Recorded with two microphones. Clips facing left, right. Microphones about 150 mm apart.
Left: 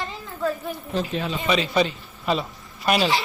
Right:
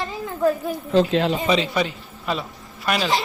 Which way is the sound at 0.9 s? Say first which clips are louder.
Right 9 dB; 85° right.